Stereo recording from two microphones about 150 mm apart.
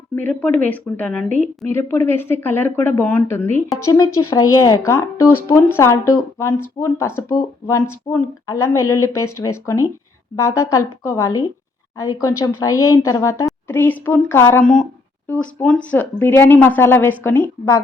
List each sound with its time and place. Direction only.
0.2 s a woman's voice: 10° left (ahead or behind)